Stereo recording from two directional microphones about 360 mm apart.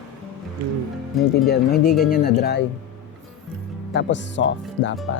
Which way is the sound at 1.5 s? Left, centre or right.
Left.